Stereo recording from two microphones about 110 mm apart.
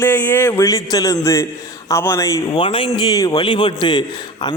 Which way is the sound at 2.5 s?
50° left (ahead or behind).